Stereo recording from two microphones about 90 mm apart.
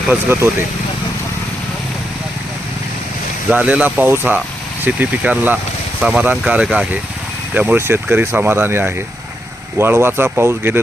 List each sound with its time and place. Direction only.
3.5 s speech: 15° right (ahead or behind)